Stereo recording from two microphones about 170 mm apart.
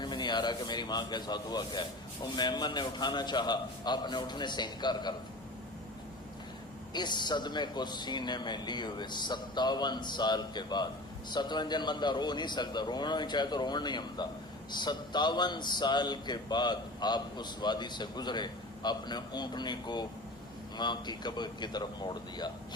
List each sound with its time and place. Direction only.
0.0 s speech: 25° left (ahead or behind)
6.9 s speech: 25° left (ahead or behind)